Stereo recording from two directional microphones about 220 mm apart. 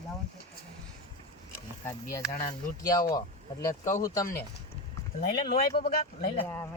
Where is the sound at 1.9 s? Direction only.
15° left (ahead or behind).